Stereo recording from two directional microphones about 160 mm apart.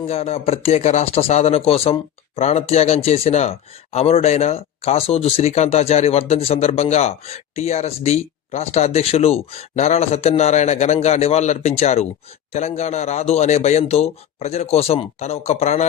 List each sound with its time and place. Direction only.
0.1 s a man's voice: 40° left (ahead or behind)